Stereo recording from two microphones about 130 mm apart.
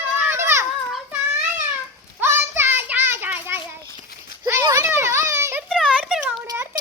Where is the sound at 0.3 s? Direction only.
20° right (ahead or behind).